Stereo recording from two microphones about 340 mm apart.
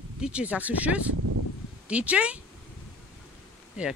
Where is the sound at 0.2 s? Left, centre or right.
Centre.